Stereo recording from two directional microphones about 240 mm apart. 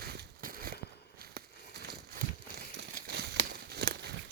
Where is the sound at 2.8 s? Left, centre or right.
Right.